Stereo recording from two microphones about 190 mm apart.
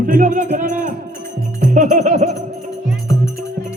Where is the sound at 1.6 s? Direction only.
40° right (ahead or behind).